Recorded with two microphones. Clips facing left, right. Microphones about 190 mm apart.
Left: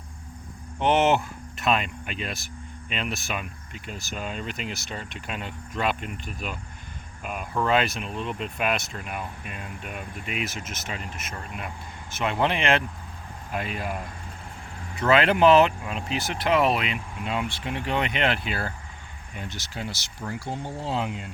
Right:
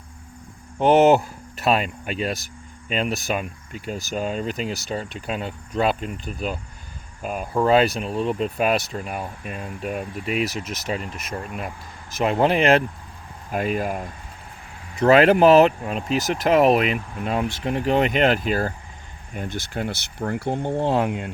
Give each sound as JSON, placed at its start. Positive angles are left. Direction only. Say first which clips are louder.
{"t": 0.8, "sound": "speech", "louder": "right 6 dB", "side_deg": -40}
{"t": 15.0, "sound": "speech", "louder": "right 5 dB", "side_deg": -40}